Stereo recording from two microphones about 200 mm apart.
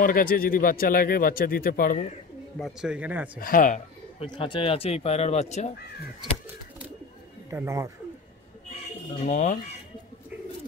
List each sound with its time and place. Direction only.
0.0 s speech: 45° left (ahead or behind)
2.6 s speech: 5° right (ahead or behind)
3.3 s speech: 45° left (ahead or behind)
4.2 s speech: 25° left (ahead or behind)
7.5 s speech: 15° right (ahead or behind)
9.2 s speech: 35° left (ahead or behind)